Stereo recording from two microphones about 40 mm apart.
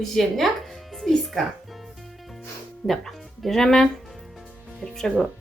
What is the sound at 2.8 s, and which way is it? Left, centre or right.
Speech, centre.